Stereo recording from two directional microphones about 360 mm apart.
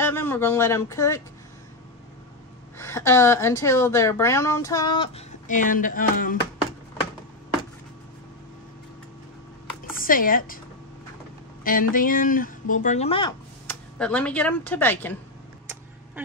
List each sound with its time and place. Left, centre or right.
0.0 s speech: centre
2.8 s a woman's voice: centre; by 6.3 s left
9.9 s speech: left
11.9 s speech: left
13.7 s speech: centre